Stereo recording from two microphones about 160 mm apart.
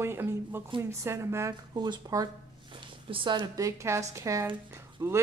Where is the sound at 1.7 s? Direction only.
30° right (ahead or behind).